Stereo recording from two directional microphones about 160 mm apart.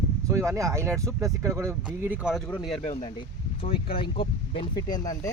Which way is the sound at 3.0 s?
30° left (ahead or behind).